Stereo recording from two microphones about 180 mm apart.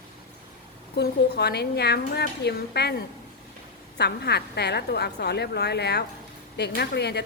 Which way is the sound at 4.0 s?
65° left (ahead or behind).